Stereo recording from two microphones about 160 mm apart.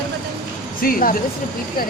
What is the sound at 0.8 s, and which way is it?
Speech, 60° left (ahead or behind).